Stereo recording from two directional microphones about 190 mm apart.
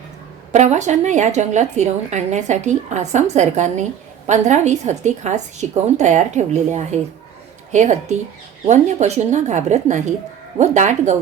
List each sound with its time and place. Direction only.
0.5 s a woman's voice: 40° right (ahead or behind)